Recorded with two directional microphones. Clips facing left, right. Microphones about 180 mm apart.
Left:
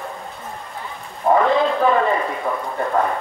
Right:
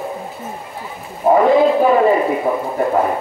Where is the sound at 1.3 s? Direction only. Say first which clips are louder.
Right 5 dB; 15° right (ahead or behind).